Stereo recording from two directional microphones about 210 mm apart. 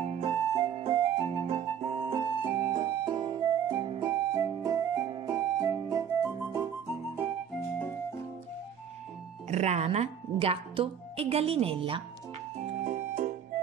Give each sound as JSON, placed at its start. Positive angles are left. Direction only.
{"t": 0.0, "sound": "music", "side_deg": -30}
{"t": 9.5, "sound": "a woman's voice", "side_deg": -30}
{"t": 12.5, "sound": "music", "side_deg": -35}